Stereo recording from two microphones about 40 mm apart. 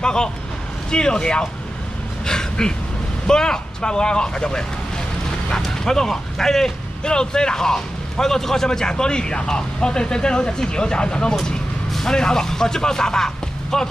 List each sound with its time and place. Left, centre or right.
0.0 s speech: centre
2.2 s a sound: centre
3.3 s speech: centre